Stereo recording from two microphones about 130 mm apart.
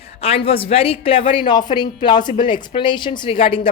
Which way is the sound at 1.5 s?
35° left (ahead or behind).